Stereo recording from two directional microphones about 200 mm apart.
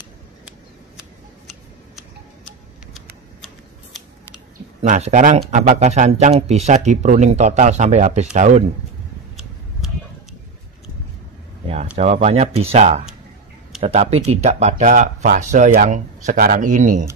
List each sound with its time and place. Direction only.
2.0 s tick-tock: centre (ahead or behind)
4.8 s speech: 35° right (ahead or behind)
11.6 s speech: 30° right (ahead or behind)